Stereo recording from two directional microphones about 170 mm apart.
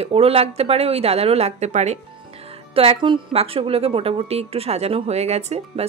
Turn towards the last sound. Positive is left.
turn(degrees=-40)  # may be behind; listen again after turning